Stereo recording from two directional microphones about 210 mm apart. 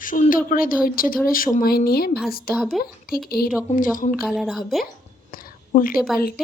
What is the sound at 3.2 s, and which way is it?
Speech, 45° left (ahead or behind).